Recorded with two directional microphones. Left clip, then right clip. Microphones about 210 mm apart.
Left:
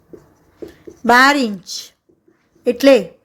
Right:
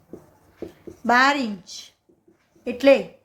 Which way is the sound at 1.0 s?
40° left (ahead or behind).